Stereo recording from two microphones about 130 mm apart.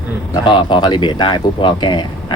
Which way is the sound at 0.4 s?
35° left (ahead or behind).